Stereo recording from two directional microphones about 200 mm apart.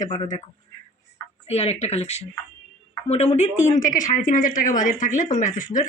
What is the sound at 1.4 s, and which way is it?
Speech, 30° left (ahead or behind).